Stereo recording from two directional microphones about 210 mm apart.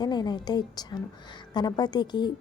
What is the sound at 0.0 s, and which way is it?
A woman's voice, 20° left (ahead or behind).